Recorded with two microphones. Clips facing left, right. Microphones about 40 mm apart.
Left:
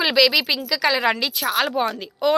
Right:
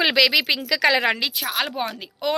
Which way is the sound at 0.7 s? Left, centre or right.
Right.